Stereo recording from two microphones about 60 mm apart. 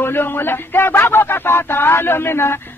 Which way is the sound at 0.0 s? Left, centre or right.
Left.